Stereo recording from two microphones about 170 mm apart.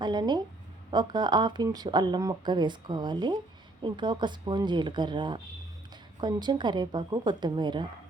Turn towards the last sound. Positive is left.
turn(degrees=-25)  # may be behind; listen again after turning